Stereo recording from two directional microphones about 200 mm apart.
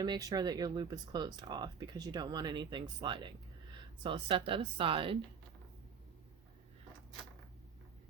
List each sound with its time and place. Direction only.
0.0 s speech: 20° right (ahead or behind)